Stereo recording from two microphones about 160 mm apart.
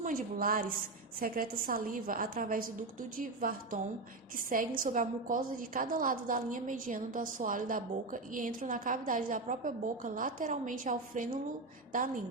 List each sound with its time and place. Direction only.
0.0 s a woman's voice: 60° right (ahead or behind)